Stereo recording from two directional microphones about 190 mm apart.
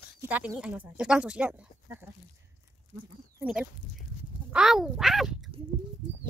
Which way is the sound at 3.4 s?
5° right (ahead or behind).